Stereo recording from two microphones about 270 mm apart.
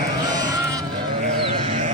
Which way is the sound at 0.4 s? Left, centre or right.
Centre.